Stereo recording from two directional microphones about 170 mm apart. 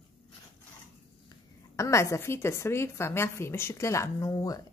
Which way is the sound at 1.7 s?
15° left (ahead or behind).